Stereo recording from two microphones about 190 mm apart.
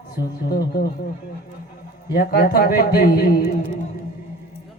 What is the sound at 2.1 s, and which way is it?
Speech, 55° left (ahead or behind).